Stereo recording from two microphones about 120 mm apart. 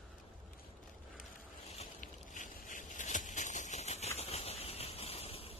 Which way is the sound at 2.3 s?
90° left.